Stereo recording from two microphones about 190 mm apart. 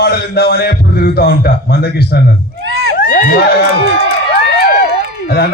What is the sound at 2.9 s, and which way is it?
Speech, 45° left (ahead or behind).